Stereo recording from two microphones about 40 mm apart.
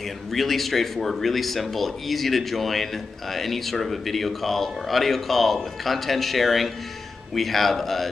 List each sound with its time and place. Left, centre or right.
0.3 s speech: centre